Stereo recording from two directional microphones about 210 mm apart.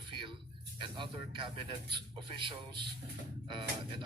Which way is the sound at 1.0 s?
25° right (ahead or behind).